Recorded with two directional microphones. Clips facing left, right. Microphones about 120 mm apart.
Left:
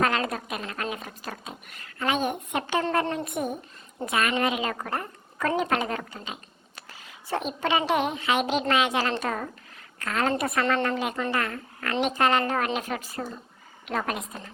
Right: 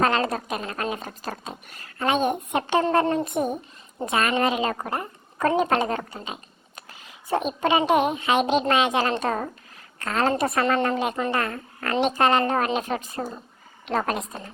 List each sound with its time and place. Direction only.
0.0 s a woman's voice: 30° right (ahead or behind)
13.8 s a woman's voice: 35° right (ahead or behind)